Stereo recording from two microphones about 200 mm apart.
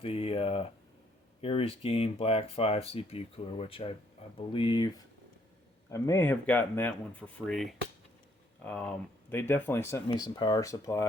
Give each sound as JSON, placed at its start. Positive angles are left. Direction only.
{"t": 0.0, "sound": "speech", "side_deg": 30}